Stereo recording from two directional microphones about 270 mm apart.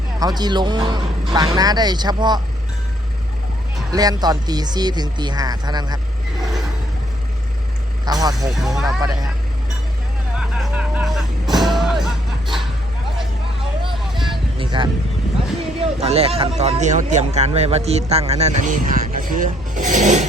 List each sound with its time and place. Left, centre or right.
0.2 s speech: centre
3.9 s speech: centre
8.0 s speech: centre
8.5 s speech: centre
10.3 s music: centre
13.9 s vehicle: centre
14.6 s vehicle: centre
15.8 s a sound: right
16.6 s speech: right